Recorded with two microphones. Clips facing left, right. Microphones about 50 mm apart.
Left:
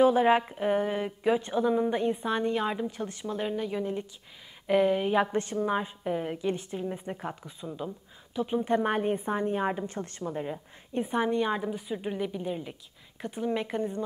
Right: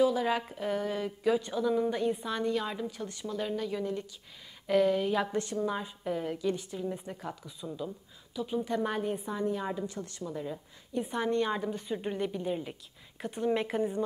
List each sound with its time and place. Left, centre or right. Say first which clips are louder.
0.0 s a woman's voice: left 6 dB; left
11.1 s a woman's voice: left 3 dB; centre